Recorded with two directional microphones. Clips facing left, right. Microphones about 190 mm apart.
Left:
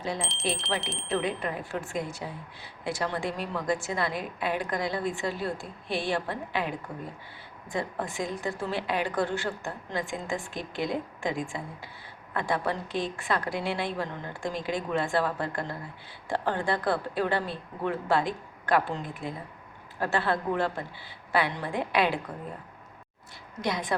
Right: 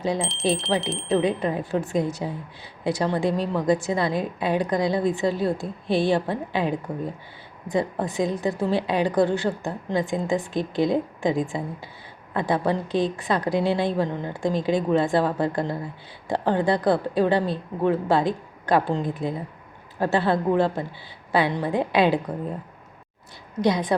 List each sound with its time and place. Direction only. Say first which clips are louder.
0.2 s speech: right 8 dB; centre (ahead or behind)
1.4 s a woman's voice: right 8 dB; 25° right (ahead or behind)
23.6 s a woman's voice: right 8 dB; 20° right (ahead or behind)